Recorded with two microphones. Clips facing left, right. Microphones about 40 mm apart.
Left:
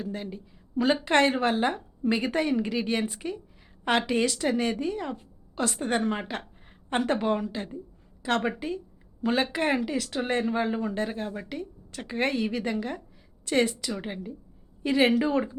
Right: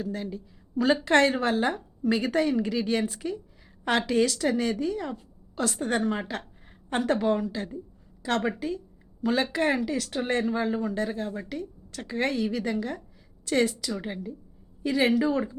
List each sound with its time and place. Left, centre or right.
0.0 s a woman's voice: left